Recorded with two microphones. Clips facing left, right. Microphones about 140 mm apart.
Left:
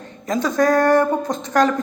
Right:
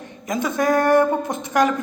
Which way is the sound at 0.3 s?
20° right (ahead or behind).